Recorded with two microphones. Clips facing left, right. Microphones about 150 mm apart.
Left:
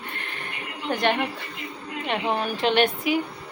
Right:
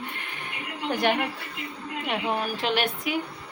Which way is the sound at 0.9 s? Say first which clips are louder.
Left 1 dB; 10° right (ahead or behind).